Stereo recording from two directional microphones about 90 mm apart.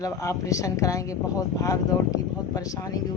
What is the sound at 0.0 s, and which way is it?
Speech, 35° left (ahead or behind).